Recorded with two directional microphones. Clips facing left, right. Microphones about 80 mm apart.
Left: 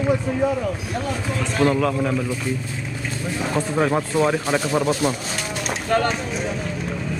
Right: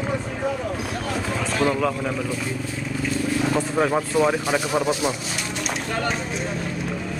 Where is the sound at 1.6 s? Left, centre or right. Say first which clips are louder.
Left 4 dB; centre.